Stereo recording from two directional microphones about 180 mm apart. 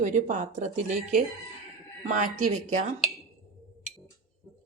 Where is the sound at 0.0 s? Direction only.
40° right (ahead or behind).